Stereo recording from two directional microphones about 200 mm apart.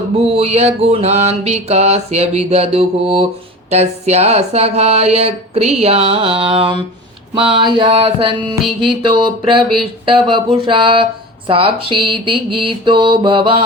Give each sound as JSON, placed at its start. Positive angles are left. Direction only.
{"t": 0.2, "sound": "speech", "side_deg": -30}